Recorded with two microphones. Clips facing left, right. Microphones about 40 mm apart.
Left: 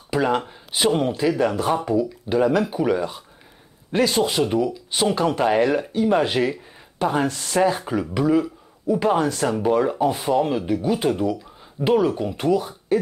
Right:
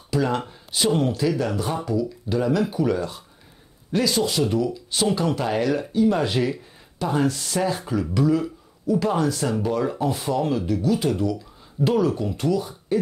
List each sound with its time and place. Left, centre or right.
0.1 s speech: left
3.9 s speech: left